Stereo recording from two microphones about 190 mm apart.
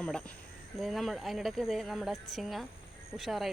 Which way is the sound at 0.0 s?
5° left (ahead or behind).